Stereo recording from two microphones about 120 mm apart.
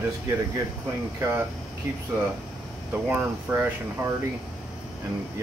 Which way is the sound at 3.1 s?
15° right (ahead or behind).